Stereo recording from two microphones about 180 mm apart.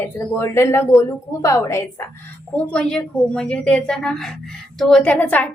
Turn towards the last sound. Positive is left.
turn(degrees=10)  # may be behind; listen again after turning